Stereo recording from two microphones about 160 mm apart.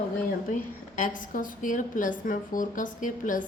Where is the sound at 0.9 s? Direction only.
55° left (ahead or behind).